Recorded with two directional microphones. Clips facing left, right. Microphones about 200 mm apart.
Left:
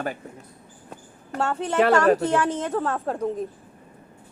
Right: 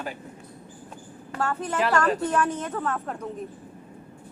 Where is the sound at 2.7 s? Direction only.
30° left (ahead or behind).